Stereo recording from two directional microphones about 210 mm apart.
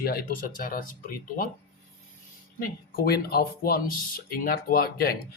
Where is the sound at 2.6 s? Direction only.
45° left (ahead or behind).